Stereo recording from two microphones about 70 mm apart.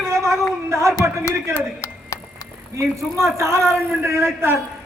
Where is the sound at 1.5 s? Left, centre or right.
Left.